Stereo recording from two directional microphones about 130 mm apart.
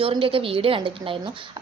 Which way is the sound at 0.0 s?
45° right (ahead or behind).